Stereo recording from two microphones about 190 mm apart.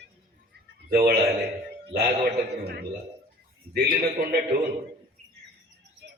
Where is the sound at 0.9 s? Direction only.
55° right (ahead or behind).